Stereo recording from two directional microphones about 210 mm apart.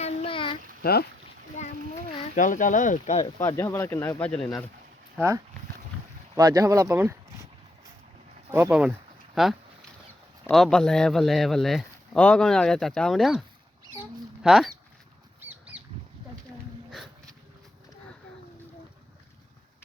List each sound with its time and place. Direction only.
0.0 s child singing: 30° left (ahead or behind)
0.8 s speech: 50° left (ahead or behind)
1.6 s a sound: 35° left (ahead or behind)
2.3 s speech: 35° left (ahead or behind)
3.3 s speech: 10° left (ahead or behind)
6.3 s speech: 15° right (ahead or behind)
8.4 s speech: 10° right (ahead or behind)
14.0 s mouse: centre (ahead or behind)
15.4 s squawk: 5° right (ahead or behind)
16.9 s a sound: centre (ahead or behind)